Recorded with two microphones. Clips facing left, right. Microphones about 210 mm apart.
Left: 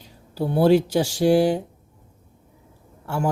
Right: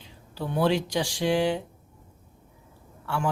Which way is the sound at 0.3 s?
40° left (ahead or behind).